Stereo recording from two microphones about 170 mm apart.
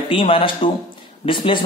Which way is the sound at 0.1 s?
30° left (ahead or behind).